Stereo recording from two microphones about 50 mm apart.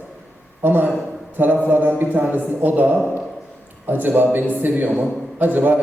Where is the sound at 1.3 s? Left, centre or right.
Right.